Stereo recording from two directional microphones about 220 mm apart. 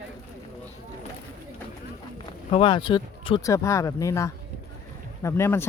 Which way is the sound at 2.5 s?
25° left (ahead or behind).